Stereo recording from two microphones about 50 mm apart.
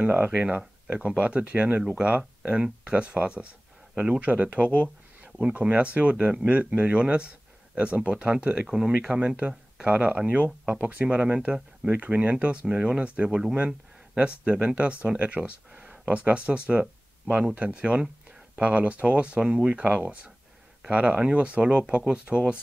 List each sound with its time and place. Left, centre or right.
0.0 s speech: right; by 8.9 s centre
9.4 s speech: right
11.9 s speech: right